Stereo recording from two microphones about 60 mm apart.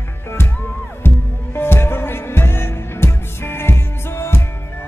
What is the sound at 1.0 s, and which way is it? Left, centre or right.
Music, left.